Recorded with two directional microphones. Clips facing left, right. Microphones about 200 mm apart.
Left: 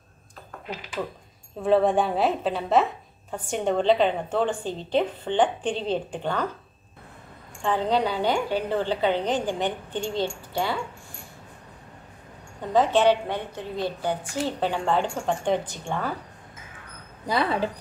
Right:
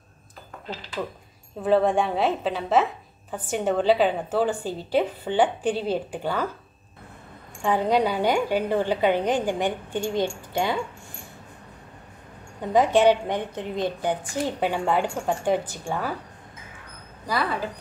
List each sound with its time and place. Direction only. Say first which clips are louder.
1.6 s a woman's voice: even; centre (ahead or behind)
7.6 s a woman's voice: right 2 dB; 10° right (ahead or behind)
12.7 s a woman's voice: right 2 dB; 10° right (ahead or behind)
17.3 s speech: left 2 dB; 25° left (ahead or behind)